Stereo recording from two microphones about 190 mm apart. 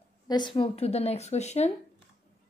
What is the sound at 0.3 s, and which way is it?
A woman's voice, 25° left (ahead or behind).